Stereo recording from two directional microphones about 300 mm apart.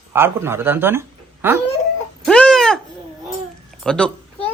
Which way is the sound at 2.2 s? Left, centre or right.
Centre.